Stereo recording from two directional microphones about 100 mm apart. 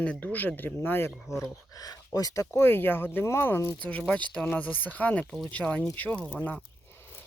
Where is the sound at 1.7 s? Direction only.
40° left (ahead or behind); by 3.8 s 20° left (ahead or behind).